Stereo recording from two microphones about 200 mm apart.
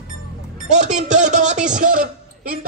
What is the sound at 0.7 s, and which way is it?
A man's voice, 35° right (ahead or behind).